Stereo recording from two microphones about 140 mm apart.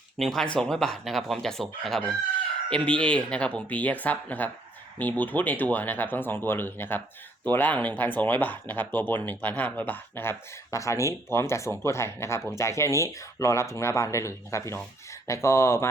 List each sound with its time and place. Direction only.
0.2 s speech: centre (ahead or behind); by 15.9 s 20° left (ahead or behind)